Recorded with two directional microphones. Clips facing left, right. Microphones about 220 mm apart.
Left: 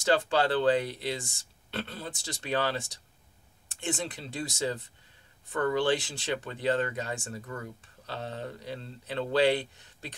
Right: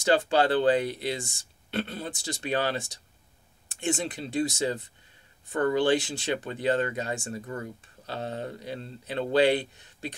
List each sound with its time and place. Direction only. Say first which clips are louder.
0.1 s speech: right 3 dB; 15° right (ahead or behind)
3.8 s speech: right 4 dB; 15° right (ahead or behind)